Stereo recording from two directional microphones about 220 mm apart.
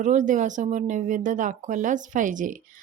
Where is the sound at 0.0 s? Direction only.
35° right (ahead or behind).